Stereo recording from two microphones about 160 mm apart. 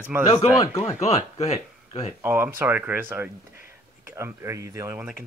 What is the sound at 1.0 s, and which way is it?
A man's voice, 40° left (ahead or behind).